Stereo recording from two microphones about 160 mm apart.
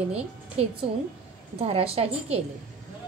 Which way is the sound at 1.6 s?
40° right (ahead or behind).